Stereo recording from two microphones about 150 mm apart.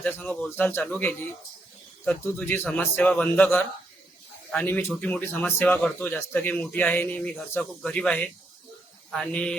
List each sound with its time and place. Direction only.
0.0 s speech: 10° left (ahead or behind)